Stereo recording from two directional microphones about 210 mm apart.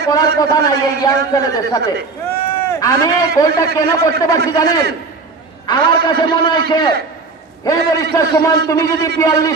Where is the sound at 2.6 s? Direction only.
15° left (ahead or behind).